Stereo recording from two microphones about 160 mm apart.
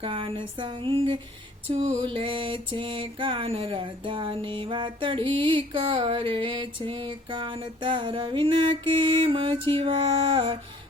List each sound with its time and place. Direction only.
0.0 s music: 35° right (ahead or behind)